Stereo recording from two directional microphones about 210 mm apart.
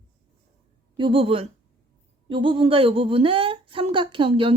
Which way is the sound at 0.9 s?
25° right (ahead or behind).